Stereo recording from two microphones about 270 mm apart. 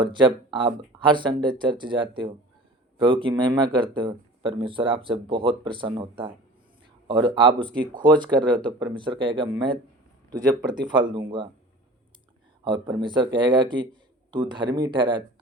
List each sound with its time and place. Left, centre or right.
0.0 s speech: centre
12.6 s speech: centre